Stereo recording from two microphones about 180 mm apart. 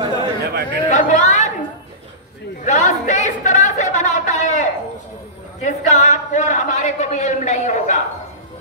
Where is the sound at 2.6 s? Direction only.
45° left (ahead or behind).